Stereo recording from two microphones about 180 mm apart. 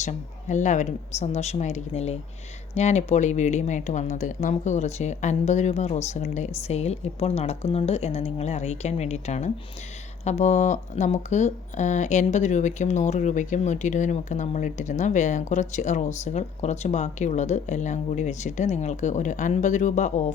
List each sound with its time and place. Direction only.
0.0 s speech: 40° left (ahead or behind)